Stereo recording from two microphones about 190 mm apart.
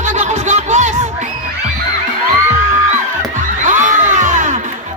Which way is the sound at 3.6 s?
40° right (ahead or behind).